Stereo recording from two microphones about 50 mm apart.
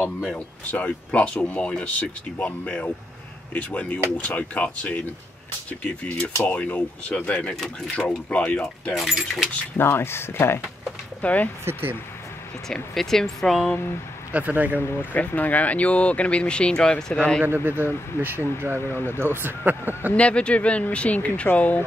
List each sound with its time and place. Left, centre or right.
0.7 s speech: left
8.9 s speech: centre
9.8 s speech: left
11.1 s speech: left
11.6 s speech: right
12.9 s speech: centre
14.3 s speech: right
15.1 s speech: left
17.5 s speech: right
18.9 s speech: left
19.1 s speech: right
20.2 s speech: left